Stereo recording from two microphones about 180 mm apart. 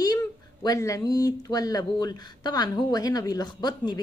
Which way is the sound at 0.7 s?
20° left (ahead or behind).